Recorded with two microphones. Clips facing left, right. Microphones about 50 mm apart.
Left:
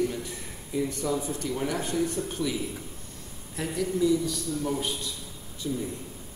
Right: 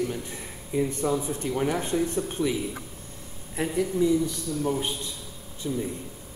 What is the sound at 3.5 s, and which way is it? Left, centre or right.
A man's voice, right.